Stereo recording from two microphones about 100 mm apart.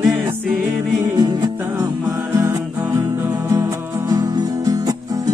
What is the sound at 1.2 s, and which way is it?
Music, 40° right (ahead or behind).